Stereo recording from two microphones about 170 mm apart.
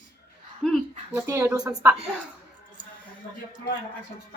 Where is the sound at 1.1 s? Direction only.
15° right (ahead or behind).